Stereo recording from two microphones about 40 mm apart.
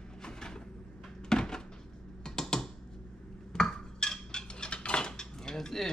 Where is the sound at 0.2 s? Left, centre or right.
Centre.